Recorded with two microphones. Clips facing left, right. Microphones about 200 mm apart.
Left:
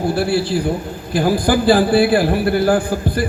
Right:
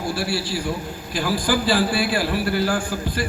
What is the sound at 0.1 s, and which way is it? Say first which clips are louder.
A man's voice: left 6 dB; 55° left (ahead or behind).